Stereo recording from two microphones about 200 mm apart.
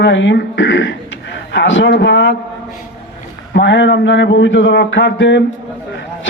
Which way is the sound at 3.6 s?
65° left (ahead or behind).